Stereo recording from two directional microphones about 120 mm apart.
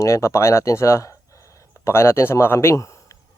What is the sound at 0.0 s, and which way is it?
Speech, 25° left (ahead or behind).